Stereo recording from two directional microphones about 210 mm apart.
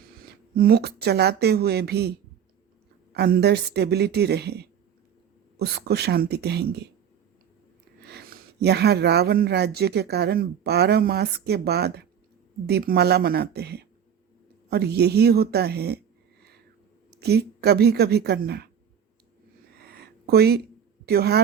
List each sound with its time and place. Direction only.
0.5 s speech: 45° right (ahead or behind)
8.0 s speech: 50° right (ahead or behind)
17.2 s speech: 50° right (ahead or behind)
19.8 s a sound: 50° right (ahead or behind)
21.1 s speech: 50° right (ahead or behind)